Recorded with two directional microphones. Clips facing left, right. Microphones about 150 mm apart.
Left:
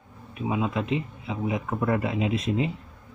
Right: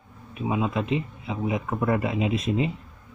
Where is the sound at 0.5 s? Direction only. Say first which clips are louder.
Right 1 dB; 25° right (ahead or behind).